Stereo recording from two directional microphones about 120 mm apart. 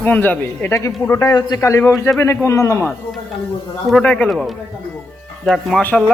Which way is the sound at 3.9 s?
10° left (ahead or behind).